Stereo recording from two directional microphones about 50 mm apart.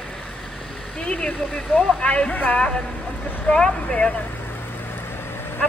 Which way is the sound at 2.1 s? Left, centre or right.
Left.